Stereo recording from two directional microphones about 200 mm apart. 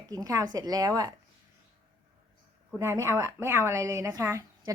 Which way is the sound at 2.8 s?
15° right (ahead or behind).